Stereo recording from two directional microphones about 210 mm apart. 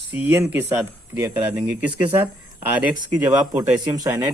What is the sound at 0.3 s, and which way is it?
Speech, 10° right (ahead or behind).